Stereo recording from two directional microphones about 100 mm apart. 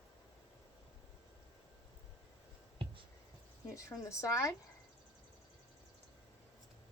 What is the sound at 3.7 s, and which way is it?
Speech, 35° left (ahead or behind).